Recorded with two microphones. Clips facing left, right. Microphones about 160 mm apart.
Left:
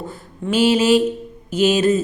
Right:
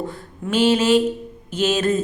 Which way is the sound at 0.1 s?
5° left (ahead or behind).